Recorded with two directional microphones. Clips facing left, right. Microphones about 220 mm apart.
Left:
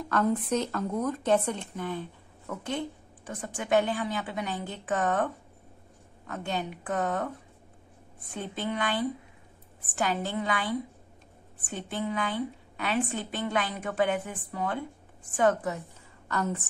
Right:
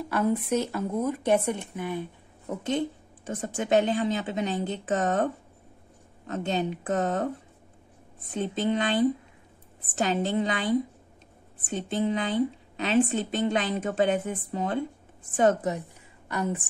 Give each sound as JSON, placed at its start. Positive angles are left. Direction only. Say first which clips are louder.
{"t": 0.0, "sound": "a woman's voice", "louder": "right 1 dB", "side_deg": -10}
{"t": 8.4, "sound": "a woman's voice", "louder": "right 6 dB", "side_deg": -25}